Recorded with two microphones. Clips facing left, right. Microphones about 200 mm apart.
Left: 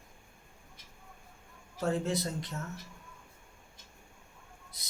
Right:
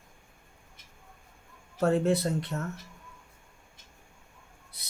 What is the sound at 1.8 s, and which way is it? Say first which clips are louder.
Speech: right 7 dB; 60° right (ahead or behind).